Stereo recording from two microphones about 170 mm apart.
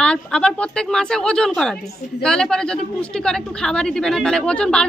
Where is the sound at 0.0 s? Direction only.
5° left (ahead or behind).